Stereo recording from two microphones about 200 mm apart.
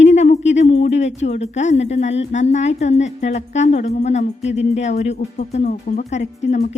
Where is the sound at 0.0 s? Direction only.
35° left (ahead or behind).